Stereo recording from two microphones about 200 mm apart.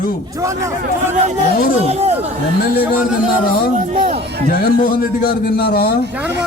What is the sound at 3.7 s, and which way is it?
Speech, 40° right (ahead or behind).